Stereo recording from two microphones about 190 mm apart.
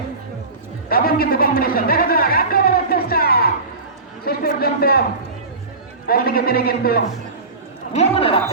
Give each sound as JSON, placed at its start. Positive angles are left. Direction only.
{"t": 0.9, "sound": "a man's voice", "side_deg": 50}
{"t": 6.1, "sound": "a man's voice", "side_deg": 50}
{"t": 7.9, "sound": "a man's voice", "side_deg": 30}